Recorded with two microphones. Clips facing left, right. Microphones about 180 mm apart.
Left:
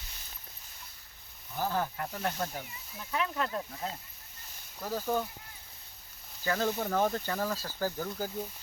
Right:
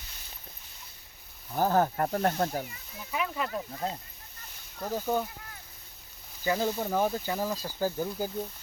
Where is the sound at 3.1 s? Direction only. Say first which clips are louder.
Right 1 dB; 5° right (ahead or behind).